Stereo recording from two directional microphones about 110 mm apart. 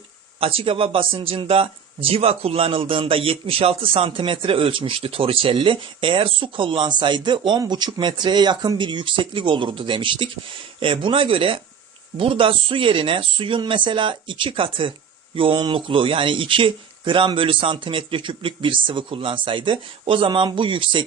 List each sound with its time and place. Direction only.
0.3 s speech: 55° right (ahead or behind)